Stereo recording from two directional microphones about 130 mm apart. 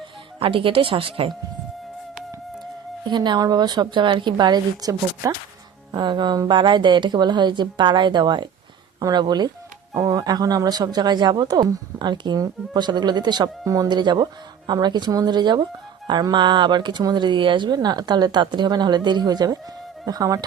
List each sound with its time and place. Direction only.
0.3 s speech: 45° right (ahead or behind)
3.1 s speech: 35° right (ahead or behind)
5.9 s speech: 35° right (ahead or behind)